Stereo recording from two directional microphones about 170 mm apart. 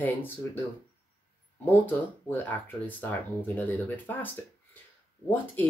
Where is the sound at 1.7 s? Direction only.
10° left (ahead or behind).